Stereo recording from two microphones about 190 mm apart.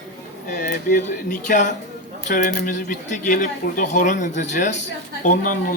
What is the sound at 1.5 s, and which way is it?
A man's voice, 40° left (ahead or behind).